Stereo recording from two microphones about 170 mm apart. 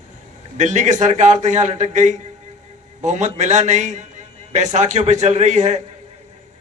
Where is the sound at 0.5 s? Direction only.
45° right (ahead or behind).